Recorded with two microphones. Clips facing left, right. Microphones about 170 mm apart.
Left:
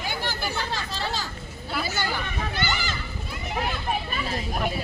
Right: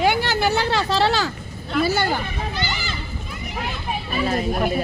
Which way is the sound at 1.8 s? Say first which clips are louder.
Right 10 dB; 55° right (ahead or behind).